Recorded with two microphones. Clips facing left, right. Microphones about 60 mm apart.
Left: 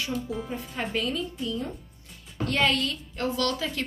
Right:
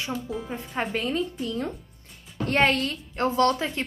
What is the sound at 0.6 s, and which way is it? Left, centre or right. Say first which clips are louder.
A woman's voice: right 4 dB; right.